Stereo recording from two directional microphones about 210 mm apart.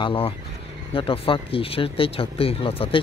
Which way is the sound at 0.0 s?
25° left (ahead or behind).